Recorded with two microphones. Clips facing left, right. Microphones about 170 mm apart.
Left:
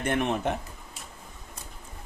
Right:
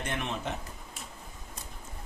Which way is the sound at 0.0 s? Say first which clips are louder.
Left 8 dB; 55° left (ahead or behind).